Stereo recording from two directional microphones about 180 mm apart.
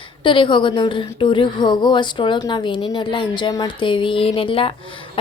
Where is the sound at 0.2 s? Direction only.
25° left (ahead or behind).